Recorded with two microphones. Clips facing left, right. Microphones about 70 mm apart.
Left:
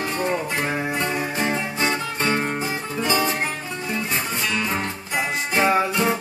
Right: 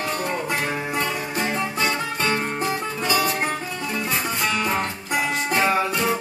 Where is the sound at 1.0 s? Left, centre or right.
Left.